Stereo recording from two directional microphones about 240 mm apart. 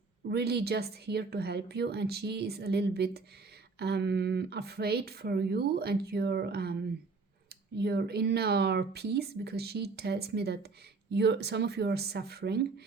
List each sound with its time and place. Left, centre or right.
0.3 s speech: right
7.8 s speech: right